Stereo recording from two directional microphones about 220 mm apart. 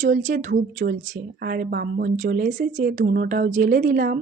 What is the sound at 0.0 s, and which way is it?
Speech, 35° right (ahead or behind).